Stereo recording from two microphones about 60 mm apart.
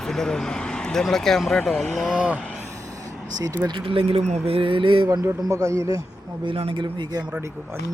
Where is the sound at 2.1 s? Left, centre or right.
Centre.